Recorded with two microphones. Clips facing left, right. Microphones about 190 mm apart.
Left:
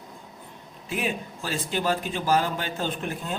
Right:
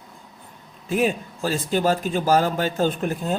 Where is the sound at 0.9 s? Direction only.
40° right (ahead or behind).